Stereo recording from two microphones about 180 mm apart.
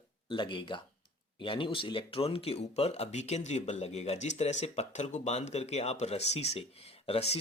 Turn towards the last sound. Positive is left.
turn(degrees=35)  # may be behind; listen again after turning